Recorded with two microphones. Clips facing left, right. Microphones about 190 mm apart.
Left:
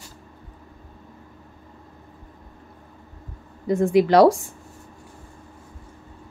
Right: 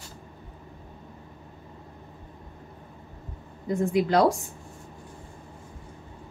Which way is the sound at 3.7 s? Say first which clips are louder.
Left 6 dB; 80° left.